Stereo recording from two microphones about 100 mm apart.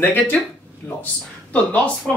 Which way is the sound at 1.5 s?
10° left (ahead or behind).